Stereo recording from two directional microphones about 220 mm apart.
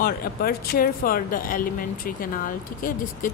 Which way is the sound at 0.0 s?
45° left (ahead or behind).